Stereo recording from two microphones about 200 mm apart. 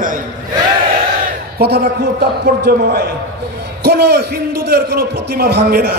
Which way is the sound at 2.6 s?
50° right (ahead or behind).